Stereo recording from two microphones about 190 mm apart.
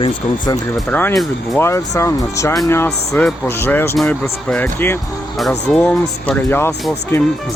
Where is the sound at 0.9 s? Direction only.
10° left (ahead or behind).